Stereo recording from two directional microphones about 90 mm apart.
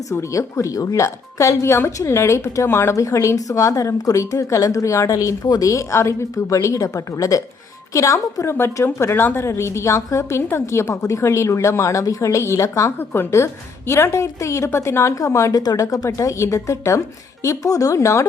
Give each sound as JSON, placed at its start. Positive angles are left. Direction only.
{"t": 0.1, "sound": "speech", "side_deg": 35}